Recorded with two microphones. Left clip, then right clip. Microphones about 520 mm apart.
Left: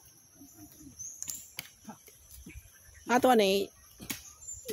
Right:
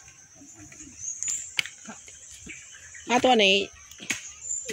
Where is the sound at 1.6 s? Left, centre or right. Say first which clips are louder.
Right 19 dB; left.